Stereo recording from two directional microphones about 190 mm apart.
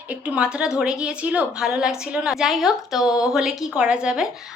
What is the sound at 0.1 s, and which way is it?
A woman's voice, 5° right (ahead or behind).